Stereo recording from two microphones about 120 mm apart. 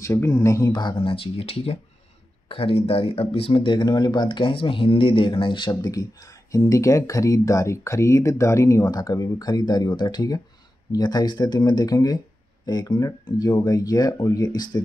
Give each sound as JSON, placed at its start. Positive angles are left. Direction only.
{"t": 0.0, "sound": "speech", "side_deg": 30}